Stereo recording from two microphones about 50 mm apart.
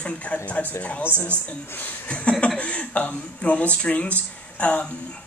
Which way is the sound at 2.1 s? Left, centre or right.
Left.